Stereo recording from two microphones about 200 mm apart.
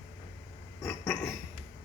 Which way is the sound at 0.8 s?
10° left (ahead or behind).